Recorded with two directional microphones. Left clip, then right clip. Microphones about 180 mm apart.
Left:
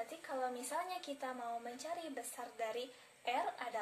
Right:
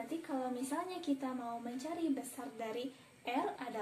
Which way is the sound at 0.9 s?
25° left (ahead or behind).